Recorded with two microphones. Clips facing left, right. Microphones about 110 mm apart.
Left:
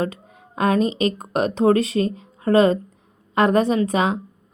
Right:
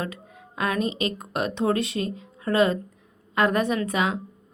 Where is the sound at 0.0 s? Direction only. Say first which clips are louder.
Left 7 dB; 30° left (ahead or behind).